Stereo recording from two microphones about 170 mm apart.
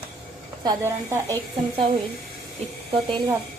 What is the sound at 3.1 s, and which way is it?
Speech, 25° right (ahead or behind).